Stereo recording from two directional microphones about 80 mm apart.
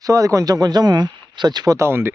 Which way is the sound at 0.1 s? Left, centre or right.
Right.